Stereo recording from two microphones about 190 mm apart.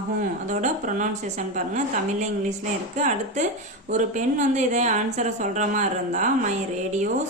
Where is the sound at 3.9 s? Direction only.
40° right (ahead or behind).